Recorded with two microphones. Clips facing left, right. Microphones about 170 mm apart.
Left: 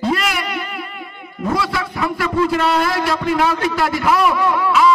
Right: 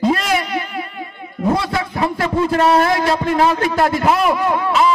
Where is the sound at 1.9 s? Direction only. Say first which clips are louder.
Even; 25° right (ahead or behind).